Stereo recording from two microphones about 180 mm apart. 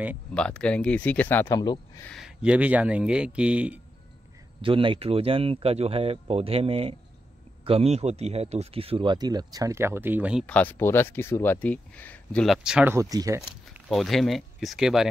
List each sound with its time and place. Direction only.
0.3 s speech: 5° left (ahead or behind)
2.0 s speech: centre (ahead or behind)
4.6 s speech: 30° right (ahead or behind); by 10.4 s 10° right (ahead or behind)
10.4 s speech: 10° left (ahead or behind)
12.9 s speech: 20° right (ahead or behind)
13.4 s speech: centre (ahead or behind)